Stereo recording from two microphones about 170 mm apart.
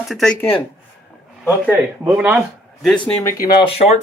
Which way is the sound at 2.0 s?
5° right (ahead or behind).